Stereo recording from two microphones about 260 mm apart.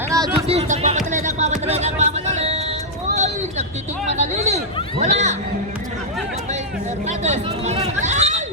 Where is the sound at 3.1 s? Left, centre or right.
Right.